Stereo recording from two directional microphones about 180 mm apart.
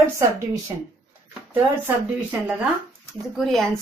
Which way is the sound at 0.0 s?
15° right (ahead or behind).